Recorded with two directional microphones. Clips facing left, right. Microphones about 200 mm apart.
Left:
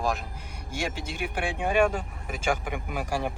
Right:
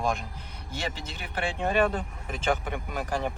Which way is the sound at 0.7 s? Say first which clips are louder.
Left 3 dB; 10° left (ahead or behind).